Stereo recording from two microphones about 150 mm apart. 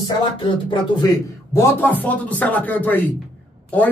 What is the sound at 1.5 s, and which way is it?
Speech, 15° left (ahead or behind).